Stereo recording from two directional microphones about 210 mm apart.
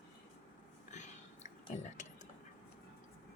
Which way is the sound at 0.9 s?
35° left (ahead or behind).